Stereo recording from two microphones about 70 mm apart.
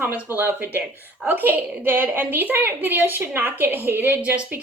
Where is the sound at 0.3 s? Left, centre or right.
Right.